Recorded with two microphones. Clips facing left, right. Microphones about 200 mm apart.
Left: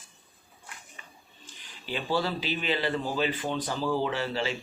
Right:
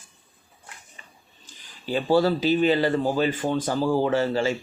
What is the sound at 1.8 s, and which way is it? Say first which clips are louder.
Speech: right 9 dB; 40° right (ahead or behind).